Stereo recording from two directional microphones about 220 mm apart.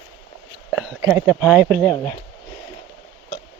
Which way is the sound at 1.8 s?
10° left (ahead or behind).